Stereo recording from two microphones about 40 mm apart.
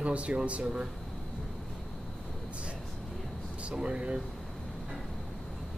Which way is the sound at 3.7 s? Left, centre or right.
Right.